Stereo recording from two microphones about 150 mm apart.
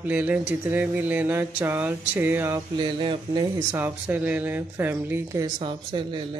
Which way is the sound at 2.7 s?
30° right (ahead or behind).